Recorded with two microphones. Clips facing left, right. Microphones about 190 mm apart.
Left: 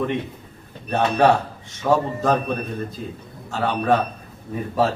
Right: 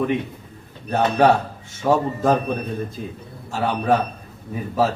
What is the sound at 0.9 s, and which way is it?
A man's voice, 5° right (ahead or behind).